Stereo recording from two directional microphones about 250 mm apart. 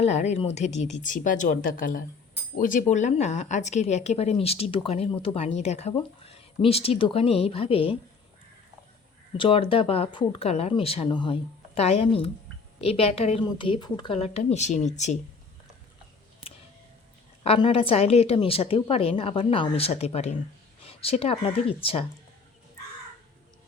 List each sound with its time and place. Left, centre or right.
0.0 s speech: left
9.4 s speech: left
17.4 s speech: left